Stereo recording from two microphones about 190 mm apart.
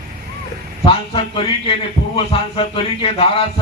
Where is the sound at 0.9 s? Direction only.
30° left (ahead or behind).